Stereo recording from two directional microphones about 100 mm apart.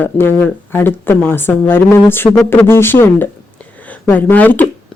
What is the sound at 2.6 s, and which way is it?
Speech, 25° left (ahead or behind).